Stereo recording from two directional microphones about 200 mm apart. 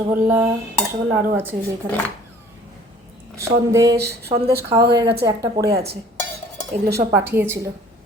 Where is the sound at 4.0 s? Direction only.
55° right (ahead or behind).